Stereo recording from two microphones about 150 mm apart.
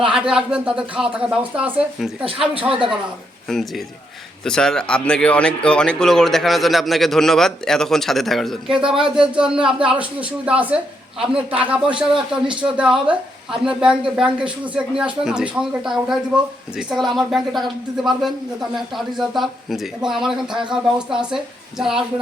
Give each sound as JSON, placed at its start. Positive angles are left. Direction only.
{"t": 0.1, "sound": "speech", "side_deg": -5}
{"t": 2.2, "sound": "speech", "side_deg": -35}
{"t": 3.5, "sound": "a man's voice", "side_deg": 0}